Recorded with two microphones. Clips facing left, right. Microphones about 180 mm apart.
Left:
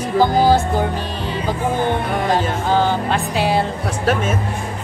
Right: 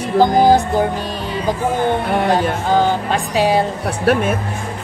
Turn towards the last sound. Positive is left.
turn(degrees=-60)  # may be behind; listen again after turning